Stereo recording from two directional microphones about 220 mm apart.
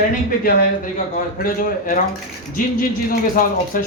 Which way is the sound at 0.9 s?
40° left (ahead or behind).